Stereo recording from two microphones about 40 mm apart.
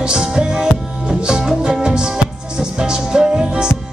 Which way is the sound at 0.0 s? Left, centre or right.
Centre.